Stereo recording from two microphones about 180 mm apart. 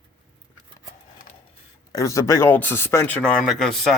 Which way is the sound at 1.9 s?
20° left (ahead or behind).